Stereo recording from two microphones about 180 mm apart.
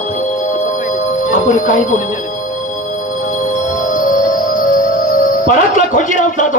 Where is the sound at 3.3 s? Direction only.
45° left (ahead or behind).